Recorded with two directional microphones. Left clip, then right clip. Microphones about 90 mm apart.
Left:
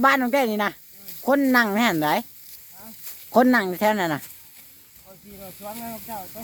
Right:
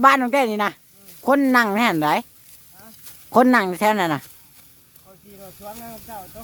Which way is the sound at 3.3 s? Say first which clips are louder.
Right 3 dB; 55° right (ahead or behind).